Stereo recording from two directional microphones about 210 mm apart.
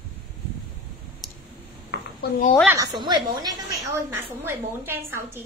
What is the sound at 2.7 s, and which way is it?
A woman's voice, 20° right (ahead or behind).